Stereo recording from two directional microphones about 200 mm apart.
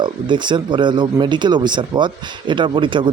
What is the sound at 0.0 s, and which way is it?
Speech, 25° right (ahead or behind).